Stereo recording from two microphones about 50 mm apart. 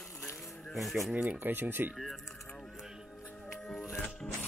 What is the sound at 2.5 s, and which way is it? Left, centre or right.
Music, left.